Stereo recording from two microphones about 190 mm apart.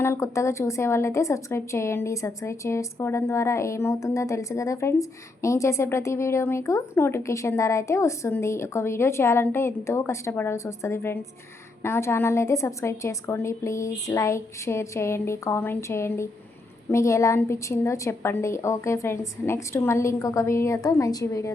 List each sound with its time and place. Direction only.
0.0 s a woman's voice: 15° left (ahead or behind)